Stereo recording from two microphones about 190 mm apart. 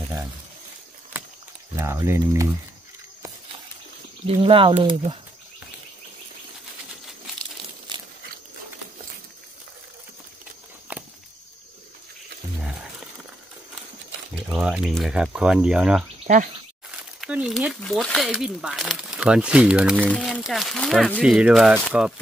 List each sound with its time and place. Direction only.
1.8 s speech: 15° right (ahead or behind)
4.3 s speech: 30° right (ahead or behind)
10.9 s a sound: 10° right (ahead or behind)
12.5 s a sound: centre (ahead or behind)
14.5 s speech: 5° right (ahead or behind)
17.2 s speech: centre (ahead or behind)